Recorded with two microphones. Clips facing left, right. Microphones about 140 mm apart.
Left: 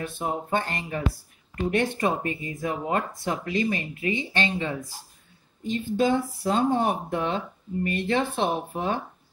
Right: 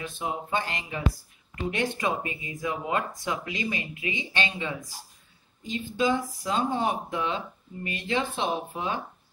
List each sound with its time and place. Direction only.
0.0 s speech: 50° left (ahead or behind)